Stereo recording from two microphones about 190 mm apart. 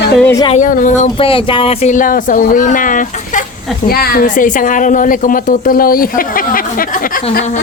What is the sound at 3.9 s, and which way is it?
A woman's voice, 55° left (ahead or behind).